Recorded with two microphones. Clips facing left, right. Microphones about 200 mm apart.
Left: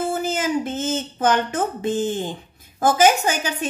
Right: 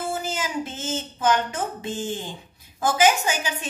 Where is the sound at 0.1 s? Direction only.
50° left (ahead or behind).